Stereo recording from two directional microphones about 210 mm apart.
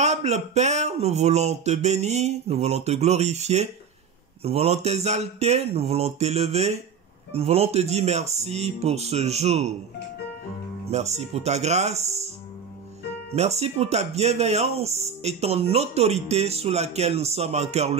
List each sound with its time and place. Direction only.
0.0 s speech: 30° right (ahead or behind)
10.9 s speech: 30° right (ahead or behind)
13.3 s speech: 30° right (ahead or behind)